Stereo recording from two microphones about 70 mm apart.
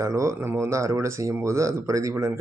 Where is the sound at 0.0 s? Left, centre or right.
Right.